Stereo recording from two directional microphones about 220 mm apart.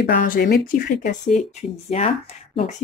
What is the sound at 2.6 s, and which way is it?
Speech, 30° left (ahead or behind).